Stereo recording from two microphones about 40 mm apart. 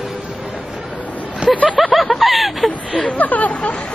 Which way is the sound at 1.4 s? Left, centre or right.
Right.